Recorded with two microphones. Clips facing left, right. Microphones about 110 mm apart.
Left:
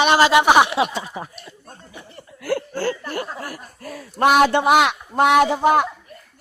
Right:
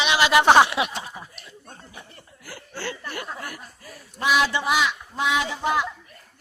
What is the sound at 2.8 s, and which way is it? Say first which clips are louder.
Speech: left 8 dB; 40° left (ahead or behind).